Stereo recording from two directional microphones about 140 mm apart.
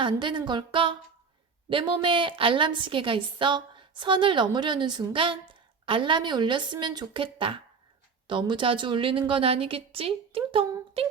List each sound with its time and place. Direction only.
0.0 s a woman's voice: 35° right (ahead or behind)